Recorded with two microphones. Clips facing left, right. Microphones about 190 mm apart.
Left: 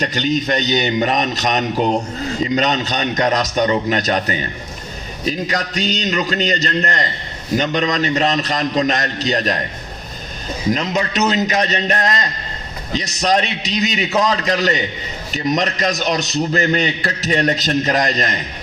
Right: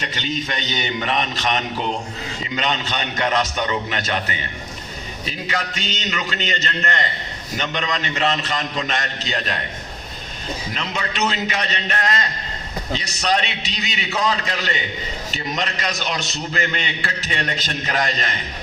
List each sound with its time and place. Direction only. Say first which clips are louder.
0.0 s a man's voice: left 8 dB; 40° left (ahead or behind)
10.7 s a man's voice: left 12 dB; 40° left (ahead or behind)